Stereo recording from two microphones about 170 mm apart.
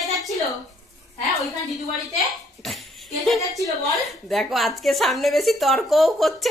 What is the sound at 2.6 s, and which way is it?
A woman's voice, centre (ahead or behind).